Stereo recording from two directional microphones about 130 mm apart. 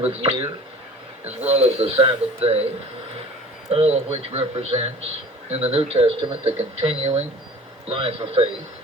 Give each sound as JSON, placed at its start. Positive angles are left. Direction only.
{"t": 0.0, "sound": "speech", "side_deg": -50}
{"t": 3.7, "sound": "speech", "side_deg": -50}